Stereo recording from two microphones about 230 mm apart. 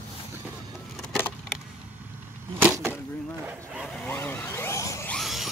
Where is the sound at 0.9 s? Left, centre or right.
Centre.